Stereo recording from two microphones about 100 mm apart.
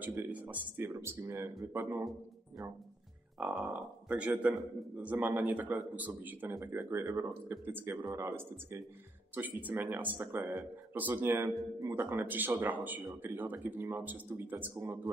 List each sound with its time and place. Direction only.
0.0 s speech: 15° right (ahead or behind)
3.3 s a man's voice: 10° right (ahead or behind); by 8.8 s 30° right (ahead or behind)
9.3 s a man's voice: 15° right (ahead or behind)